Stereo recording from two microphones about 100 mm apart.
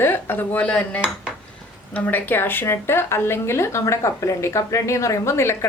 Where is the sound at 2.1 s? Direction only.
20° left (ahead or behind).